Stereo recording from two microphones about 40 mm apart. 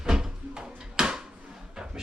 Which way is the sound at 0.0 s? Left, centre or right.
Centre.